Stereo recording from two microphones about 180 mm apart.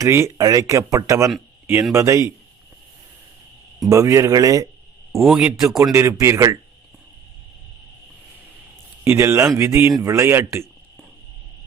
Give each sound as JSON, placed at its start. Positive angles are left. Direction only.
{"t": 0.0, "sound": "speech", "side_deg": -15}
{"t": 3.8, "sound": "speech", "side_deg": -15}
{"t": 5.2, "sound": "speech", "side_deg": -5}
{"t": 5.8, "sound": "speech", "side_deg": -15}
{"t": 9.0, "sound": "speech", "side_deg": -15}